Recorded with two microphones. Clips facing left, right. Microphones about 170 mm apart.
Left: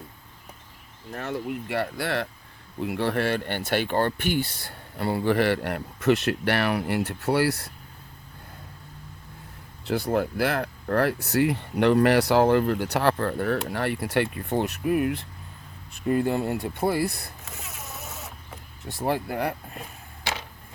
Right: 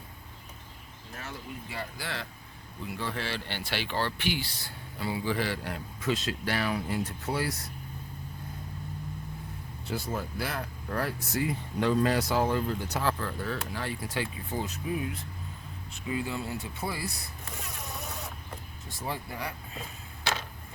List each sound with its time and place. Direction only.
1.1 s speech: 65° left (ahead or behind)
9.8 s speech: 65° left (ahead or behind)
17.4 s vehicle: 5° left (ahead or behind)
18.9 s speech: 65° left (ahead or behind)